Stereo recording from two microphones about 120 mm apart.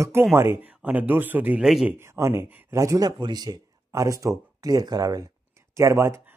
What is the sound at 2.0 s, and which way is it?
Speech, 25° right (ahead or behind).